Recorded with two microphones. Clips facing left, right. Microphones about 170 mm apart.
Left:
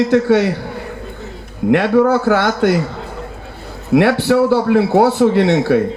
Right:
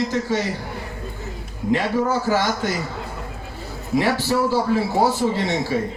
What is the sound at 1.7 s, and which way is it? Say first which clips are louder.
A man's voice: left 8 dB; 65° left (ahead or behind).